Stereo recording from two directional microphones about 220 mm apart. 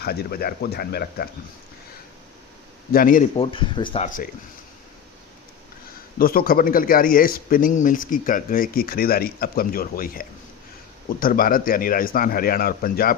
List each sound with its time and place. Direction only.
0.0 s speech: 45° left (ahead or behind)
2.9 s a man's voice: 40° left (ahead or behind)
3.3 s speech: 25° left (ahead or behind)
6.1 s a man's voice: 40° left (ahead or behind)